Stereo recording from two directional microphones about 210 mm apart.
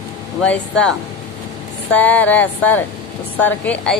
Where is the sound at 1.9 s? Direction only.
5° left (ahead or behind).